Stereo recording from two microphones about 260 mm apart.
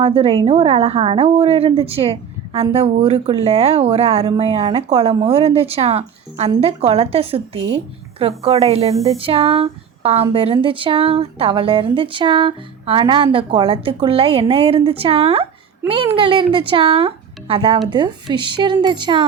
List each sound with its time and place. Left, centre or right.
0.0 s a woman's voice: right